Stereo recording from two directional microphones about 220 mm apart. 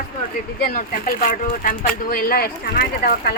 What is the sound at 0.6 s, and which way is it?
Speech, 40° left (ahead or behind).